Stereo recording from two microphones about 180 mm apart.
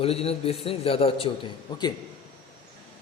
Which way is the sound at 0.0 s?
35° left (ahead or behind).